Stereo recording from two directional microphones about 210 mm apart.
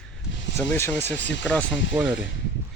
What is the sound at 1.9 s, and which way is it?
Speech, 5° right (ahead or behind).